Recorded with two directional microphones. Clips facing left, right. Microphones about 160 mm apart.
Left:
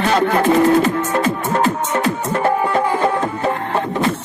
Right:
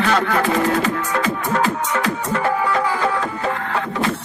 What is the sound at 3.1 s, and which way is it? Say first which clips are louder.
Music: left 3 dB; 35° left (ahead or behind).